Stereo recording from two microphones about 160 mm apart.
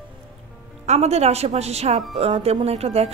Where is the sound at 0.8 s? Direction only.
45° right (ahead or behind).